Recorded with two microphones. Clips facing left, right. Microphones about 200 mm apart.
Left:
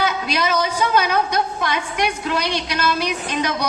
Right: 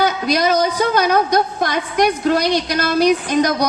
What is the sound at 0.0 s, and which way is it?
A woman's voice, 40° right (ahead or behind).